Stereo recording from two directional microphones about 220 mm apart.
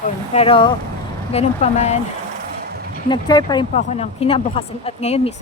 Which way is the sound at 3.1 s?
20° left (ahead or behind).